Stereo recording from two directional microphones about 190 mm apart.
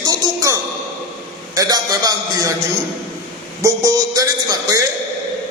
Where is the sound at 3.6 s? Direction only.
20° right (ahead or behind).